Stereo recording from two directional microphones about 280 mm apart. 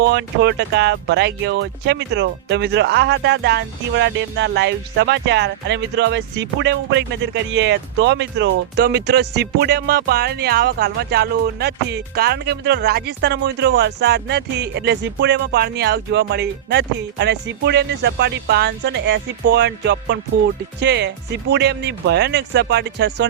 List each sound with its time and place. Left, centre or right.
0.0 s speech: right